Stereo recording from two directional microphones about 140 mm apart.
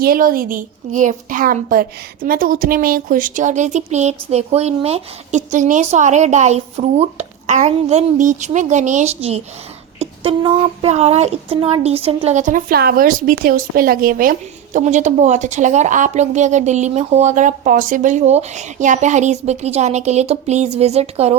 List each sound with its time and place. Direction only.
0.0 s speech: 90° right; by 21.3 s 50° right (ahead or behind)